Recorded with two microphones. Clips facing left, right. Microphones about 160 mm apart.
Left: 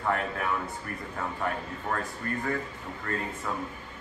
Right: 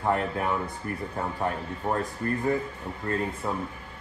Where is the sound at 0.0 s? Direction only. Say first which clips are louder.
Right 3 dB; 30° right (ahead or behind).